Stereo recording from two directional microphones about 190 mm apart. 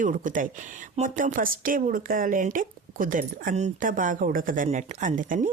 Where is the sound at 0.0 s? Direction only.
45° right (ahead or behind).